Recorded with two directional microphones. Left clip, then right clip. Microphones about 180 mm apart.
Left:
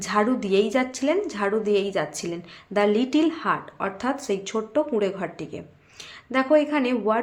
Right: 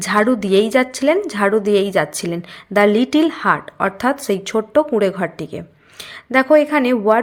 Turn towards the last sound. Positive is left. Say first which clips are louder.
# right 8 dB
turn(degrees=-35)  # may be behind; listen again after turning